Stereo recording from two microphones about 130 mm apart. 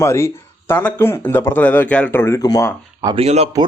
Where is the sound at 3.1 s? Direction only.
50° right (ahead or behind).